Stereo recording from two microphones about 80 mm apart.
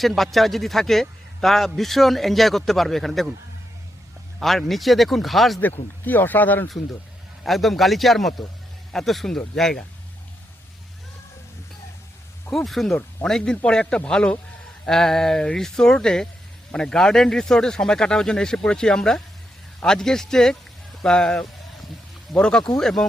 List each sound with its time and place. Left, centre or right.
0.0 s a man's voice: centre
4.4 s a man's voice: centre
5.5 s speech: left
7.4 s a man's voice: centre
12.5 s a man's voice: centre